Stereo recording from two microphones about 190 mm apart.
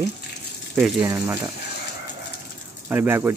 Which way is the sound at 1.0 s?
15° right (ahead or behind).